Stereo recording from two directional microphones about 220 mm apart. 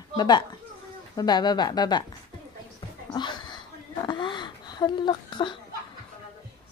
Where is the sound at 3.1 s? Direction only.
20° left (ahead or behind).